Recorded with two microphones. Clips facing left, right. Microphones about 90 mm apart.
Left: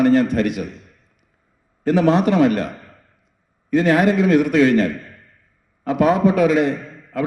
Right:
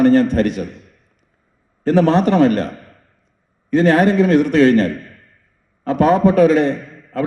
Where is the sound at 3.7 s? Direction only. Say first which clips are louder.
Right 2 dB; 35° right (ahead or behind).